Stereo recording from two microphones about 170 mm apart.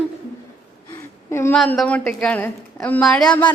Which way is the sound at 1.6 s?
5° left (ahead or behind).